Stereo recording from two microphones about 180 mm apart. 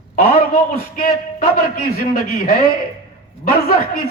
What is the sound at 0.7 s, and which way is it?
Speech, 55° left (ahead or behind).